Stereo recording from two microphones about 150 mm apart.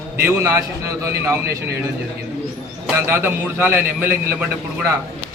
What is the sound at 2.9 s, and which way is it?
A man's voice, 15° right (ahead or behind).